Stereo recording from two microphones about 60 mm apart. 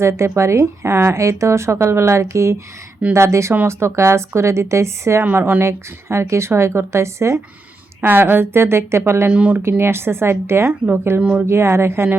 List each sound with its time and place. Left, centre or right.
0.0 s a woman's voice: right
5.2 s a woman's voice: right
8.0 s a woman's voice: right
9.3 s speech: right
9.6 s a woman's voice: right
11.2 s speech: right
11.4 s a woman's voice: right